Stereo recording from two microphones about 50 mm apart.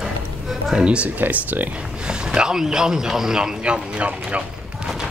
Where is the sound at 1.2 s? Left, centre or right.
Right.